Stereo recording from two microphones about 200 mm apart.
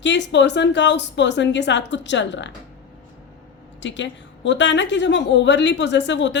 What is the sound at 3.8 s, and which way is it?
A woman's voice, 65° left (ahead or behind).